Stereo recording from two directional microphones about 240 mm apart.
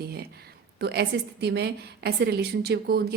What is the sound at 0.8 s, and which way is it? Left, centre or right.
A woman's voice, right.